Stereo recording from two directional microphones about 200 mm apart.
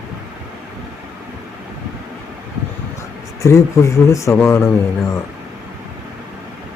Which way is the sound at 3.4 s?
15° left (ahead or behind).